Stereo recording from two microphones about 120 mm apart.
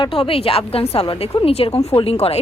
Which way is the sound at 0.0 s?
50° left (ahead or behind).